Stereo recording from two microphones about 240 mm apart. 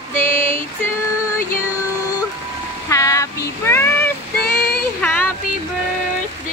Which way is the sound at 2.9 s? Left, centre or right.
Centre.